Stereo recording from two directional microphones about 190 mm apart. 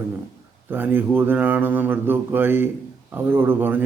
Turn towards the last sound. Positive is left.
turn(degrees=-10)  # may be behind; listen again after turning